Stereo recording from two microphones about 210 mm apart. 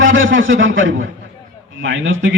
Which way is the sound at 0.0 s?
65° right (ahead or behind).